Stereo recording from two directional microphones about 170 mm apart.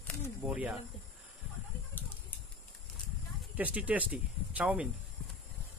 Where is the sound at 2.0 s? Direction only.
10° left (ahead or behind).